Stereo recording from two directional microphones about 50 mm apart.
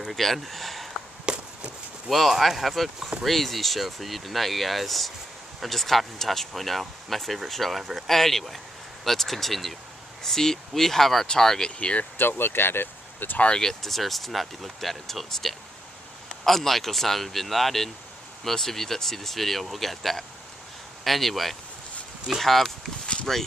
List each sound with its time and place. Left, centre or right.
0.0 s speech: centre
1.2 s walk: centre
2.0 s speech: centre
11.8 s speech: left
12.1 s speech: left
13.6 s speech: centre